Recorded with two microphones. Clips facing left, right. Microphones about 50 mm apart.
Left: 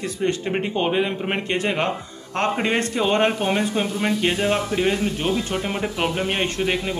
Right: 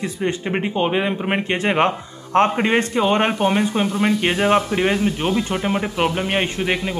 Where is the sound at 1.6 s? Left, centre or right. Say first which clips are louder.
Right 5 dB; right.